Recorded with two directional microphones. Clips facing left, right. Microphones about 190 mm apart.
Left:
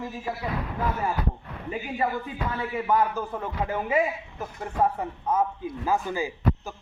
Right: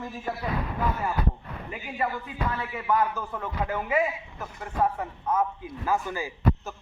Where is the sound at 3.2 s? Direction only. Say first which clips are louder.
Left 2 dB; 20° left (ahead or behind).